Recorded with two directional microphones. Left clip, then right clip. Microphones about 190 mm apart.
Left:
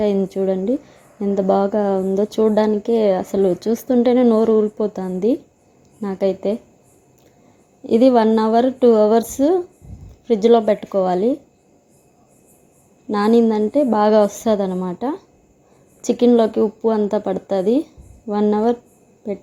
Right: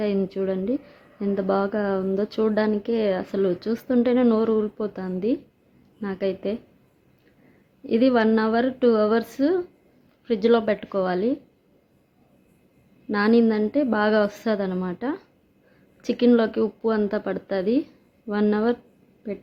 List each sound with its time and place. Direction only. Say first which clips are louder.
0.0 s a woman's voice: left 6 dB; 20° left (ahead or behind)
7.9 s a woman's voice: left 6 dB; 20° left (ahead or behind)
13.1 s a woman's voice: left 4 dB; 15° left (ahead or behind)